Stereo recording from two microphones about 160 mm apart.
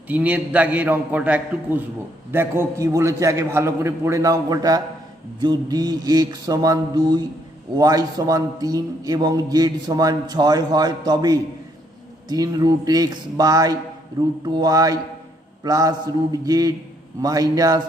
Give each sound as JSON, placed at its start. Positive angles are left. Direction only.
{"t": 0.1, "sound": "a man's voice", "side_deg": -10}